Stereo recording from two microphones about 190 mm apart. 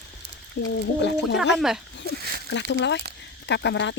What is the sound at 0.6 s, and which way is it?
Speech, 65° left (ahead or behind).